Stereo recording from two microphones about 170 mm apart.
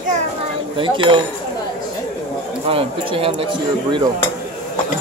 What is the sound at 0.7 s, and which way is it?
Speech, 30° right (ahead or behind).